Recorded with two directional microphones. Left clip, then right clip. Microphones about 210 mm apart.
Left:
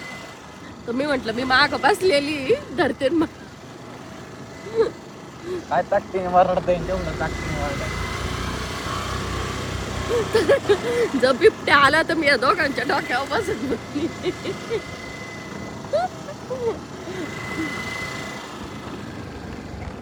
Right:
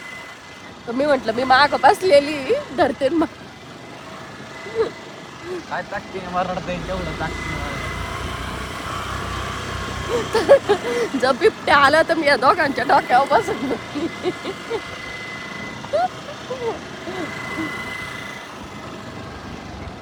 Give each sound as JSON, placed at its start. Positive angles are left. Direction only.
{"t": 0.9, "sound": "speech", "side_deg": -5}
{"t": 5.7, "sound": "speech", "side_deg": 30}
{"t": 8.1, "sound": "vehicle", "side_deg": 0}
{"t": 10.1, "sound": "speech", "side_deg": -5}
{"t": 15.9, "sound": "vehicle", "side_deg": 0}
{"t": 17.6, "sound": "vehicle", "side_deg": 0}